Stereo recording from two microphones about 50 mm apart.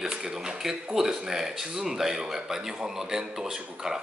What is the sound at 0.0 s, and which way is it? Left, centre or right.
Speech, centre.